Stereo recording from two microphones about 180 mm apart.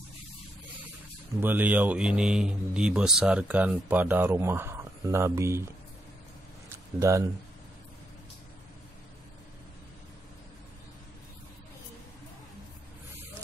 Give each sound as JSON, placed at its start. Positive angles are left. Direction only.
{"t": 1.4, "sound": "speech", "side_deg": -10}
{"t": 7.0, "sound": "speech", "side_deg": -15}